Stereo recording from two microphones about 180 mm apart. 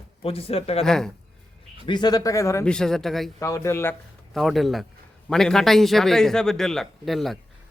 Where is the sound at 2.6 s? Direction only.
5° left (ahead or behind).